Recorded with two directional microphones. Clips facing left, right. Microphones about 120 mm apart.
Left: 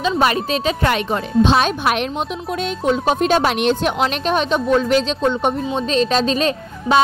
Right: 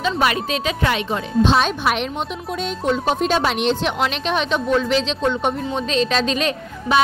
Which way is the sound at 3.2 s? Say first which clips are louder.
Left 3 dB; 55° left (ahead or behind).